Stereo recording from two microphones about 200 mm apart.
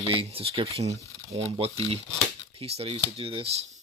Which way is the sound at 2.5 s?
30° right (ahead or behind).